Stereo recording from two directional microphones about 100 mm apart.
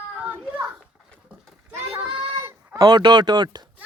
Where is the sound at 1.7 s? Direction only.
20° right (ahead or behind).